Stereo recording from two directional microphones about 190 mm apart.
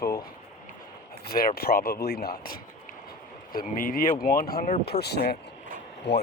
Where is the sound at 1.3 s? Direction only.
50° left (ahead or behind).